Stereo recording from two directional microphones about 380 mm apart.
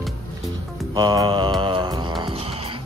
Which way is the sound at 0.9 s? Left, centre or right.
Centre.